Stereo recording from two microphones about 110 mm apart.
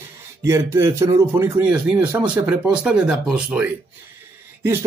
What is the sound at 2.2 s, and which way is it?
Speech, 15° right (ahead or behind).